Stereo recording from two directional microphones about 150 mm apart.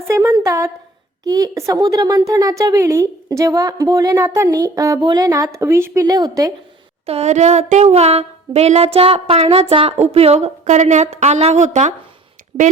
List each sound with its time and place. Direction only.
0.1 s a woman's voice: 20° right (ahead or behind)
7.0 s a sound: 45° right (ahead or behind)
12.5 s speech: 35° right (ahead or behind)